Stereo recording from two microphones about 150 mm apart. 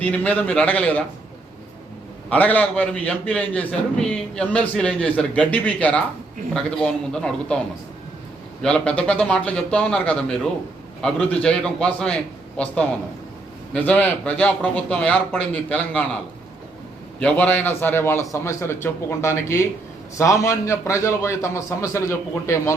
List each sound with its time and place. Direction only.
0.0 s a man's voice: 10° left (ahead or behind)
2.3 s a man's voice: 10° left (ahead or behind)
8.6 s a man's voice: 5° left (ahead or behind)
17.2 s a man's voice: 10° left (ahead or behind)